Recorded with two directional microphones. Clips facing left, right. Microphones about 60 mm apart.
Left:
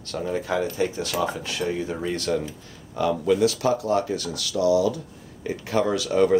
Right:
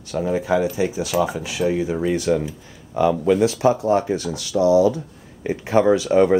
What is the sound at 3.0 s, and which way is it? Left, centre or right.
Speech, right.